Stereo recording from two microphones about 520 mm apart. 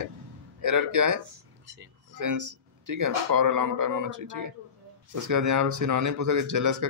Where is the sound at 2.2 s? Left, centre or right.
Right.